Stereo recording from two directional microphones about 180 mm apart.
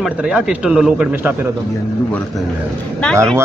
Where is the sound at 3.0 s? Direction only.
5° left (ahead or behind).